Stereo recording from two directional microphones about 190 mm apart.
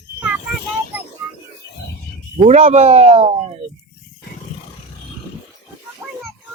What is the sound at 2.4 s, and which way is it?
Speech, 35° right (ahead or behind).